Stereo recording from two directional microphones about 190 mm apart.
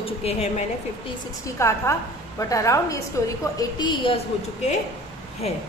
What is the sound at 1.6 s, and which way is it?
A woman's voice, 15° left (ahead or behind).